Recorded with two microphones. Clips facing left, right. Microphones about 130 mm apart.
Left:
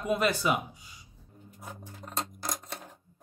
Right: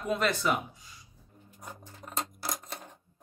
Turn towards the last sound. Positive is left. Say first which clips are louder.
# left 1 dB
turn(degrees=5)  # may be behind; listen again after turning